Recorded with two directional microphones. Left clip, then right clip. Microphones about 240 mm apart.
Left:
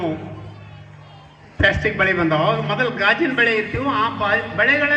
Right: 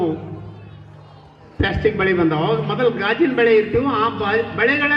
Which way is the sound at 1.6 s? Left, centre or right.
Centre.